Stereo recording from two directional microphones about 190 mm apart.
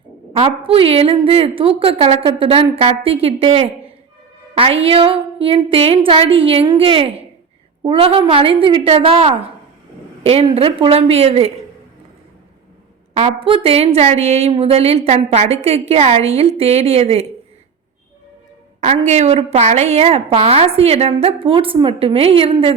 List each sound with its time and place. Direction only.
0.3 s a woman's voice: 30° right (ahead or behind)
13.2 s a woman's voice: 30° right (ahead or behind)
19.0 s a woman's voice: 35° right (ahead or behind)